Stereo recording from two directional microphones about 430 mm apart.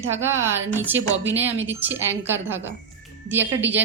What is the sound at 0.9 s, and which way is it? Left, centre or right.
Speech, right.